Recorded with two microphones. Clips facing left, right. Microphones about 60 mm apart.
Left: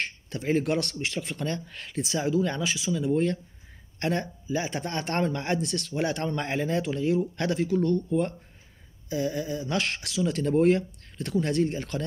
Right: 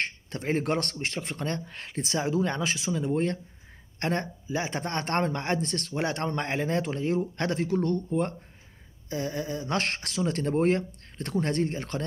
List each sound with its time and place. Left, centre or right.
0.3 s speech: right
2.0 s speech: right
10.4 s speech: right
11.6 s speech: right